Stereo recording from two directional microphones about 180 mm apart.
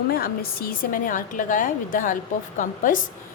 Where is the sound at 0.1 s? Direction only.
55° left (ahead or behind).